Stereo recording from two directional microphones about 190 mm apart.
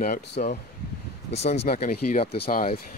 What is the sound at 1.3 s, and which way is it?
Speech, 35° left (ahead or behind).